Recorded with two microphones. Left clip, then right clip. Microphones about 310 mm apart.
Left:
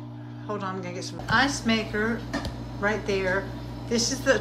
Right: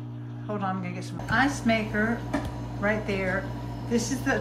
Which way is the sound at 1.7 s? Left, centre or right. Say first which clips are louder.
Even; centre.